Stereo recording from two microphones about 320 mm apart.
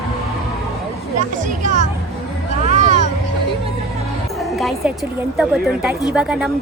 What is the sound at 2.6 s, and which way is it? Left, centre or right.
Vehicle, right.